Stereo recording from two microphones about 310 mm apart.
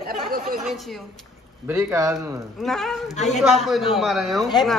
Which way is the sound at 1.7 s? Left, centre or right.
Centre.